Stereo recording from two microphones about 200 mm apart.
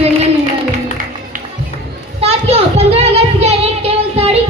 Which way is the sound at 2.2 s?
30° right (ahead or behind).